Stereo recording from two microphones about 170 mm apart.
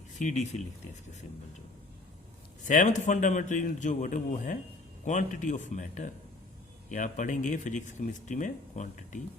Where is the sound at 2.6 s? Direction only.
45° left (ahead or behind).